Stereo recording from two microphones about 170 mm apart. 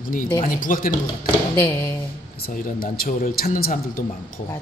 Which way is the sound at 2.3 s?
60° left (ahead or behind).